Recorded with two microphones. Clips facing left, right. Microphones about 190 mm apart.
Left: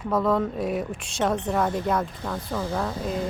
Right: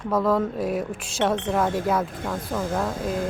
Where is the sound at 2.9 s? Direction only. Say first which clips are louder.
Right 2 dB; 50° right (ahead or behind).